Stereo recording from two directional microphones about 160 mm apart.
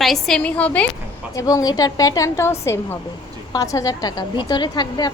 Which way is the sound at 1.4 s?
20° left (ahead or behind).